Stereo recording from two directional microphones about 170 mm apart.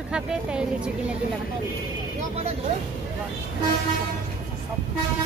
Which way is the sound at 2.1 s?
40° right (ahead or behind).